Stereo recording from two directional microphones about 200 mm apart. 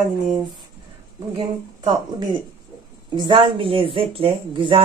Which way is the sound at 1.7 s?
20° right (ahead or behind).